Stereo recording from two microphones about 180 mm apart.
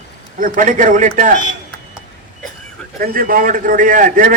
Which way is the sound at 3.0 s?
50° right (ahead or behind).